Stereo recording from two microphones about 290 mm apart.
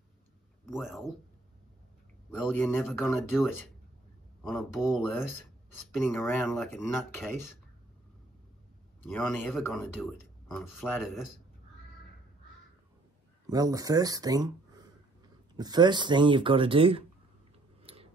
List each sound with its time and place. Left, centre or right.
0.7 s speech: centre
2.4 s speech: centre
9.1 s speech: centre
13.5 s speech: centre